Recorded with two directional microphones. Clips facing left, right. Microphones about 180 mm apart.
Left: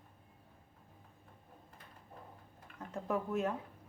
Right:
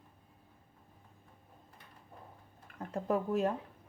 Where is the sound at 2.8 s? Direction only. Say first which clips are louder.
Right 4 dB; 35° right (ahead or behind).